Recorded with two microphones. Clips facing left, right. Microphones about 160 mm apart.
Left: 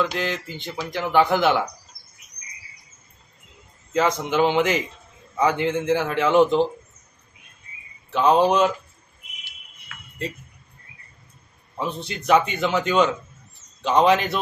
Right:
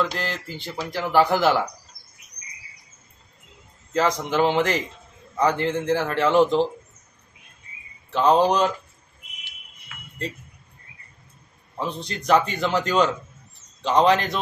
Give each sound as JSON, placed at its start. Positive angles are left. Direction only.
{"t": 0.0, "sound": "speech", "side_deg": 0}
{"t": 3.9, "sound": "speech", "side_deg": 5}
{"t": 8.1, "sound": "speech", "side_deg": 5}
{"t": 11.7, "sound": "speech", "side_deg": 5}